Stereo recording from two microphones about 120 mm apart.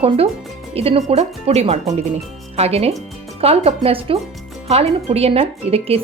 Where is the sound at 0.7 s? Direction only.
55° right (ahead or behind).